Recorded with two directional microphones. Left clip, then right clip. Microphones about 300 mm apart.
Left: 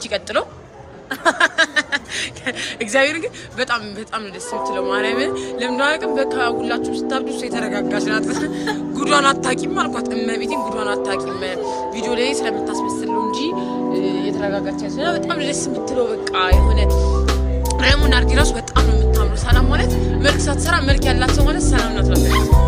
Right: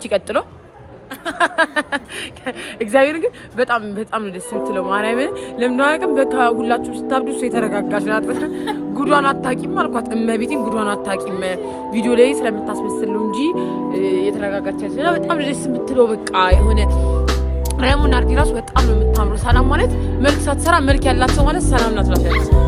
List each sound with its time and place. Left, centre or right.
1.4 s speech: centre
14.0 s speech: centre